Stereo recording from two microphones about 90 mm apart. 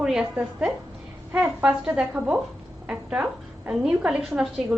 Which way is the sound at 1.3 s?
15° right (ahead or behind).